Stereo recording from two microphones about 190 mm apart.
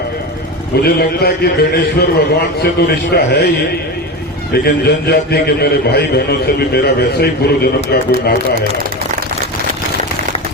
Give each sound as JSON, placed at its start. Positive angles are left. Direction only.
{"t": 0.8, "sound": "a man's voice", "side_deg": 55}
{"t": 4.5, "sound": "a man's voice", "side_deg": 55}